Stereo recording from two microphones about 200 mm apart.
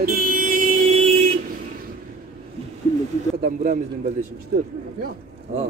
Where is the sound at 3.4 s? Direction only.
40° right (ahead or behind).